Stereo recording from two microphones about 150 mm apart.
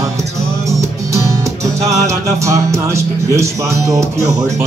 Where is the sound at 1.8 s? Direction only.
20° right (ahead or behind).